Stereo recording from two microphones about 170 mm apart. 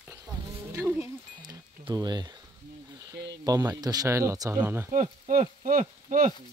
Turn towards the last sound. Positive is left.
turn(degrees=-50)  # may be behind; listen again after turning